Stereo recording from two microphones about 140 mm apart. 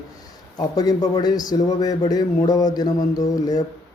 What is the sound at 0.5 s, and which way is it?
Speech, 25° left (ahead or behind).